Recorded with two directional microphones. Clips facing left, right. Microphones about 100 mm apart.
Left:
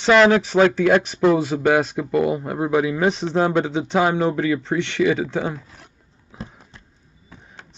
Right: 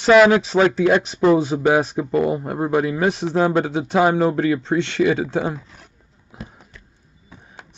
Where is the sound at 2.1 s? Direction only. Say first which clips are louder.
Even; 5° left (ahead or behind).